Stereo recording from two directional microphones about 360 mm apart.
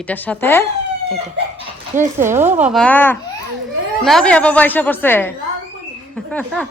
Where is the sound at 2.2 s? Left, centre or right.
Centre.